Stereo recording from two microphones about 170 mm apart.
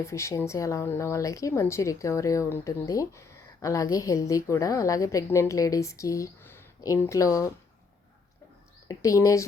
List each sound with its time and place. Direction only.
0.0 s speech: 15° left (ahead or behind)
8.9 s speech: 20° left (ahead or behind)